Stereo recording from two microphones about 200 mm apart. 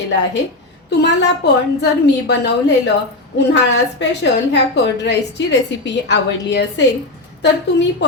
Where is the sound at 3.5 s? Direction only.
60° left (ahead or behind).